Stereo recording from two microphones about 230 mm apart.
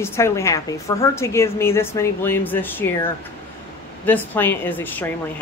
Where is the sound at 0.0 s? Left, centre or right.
Centre.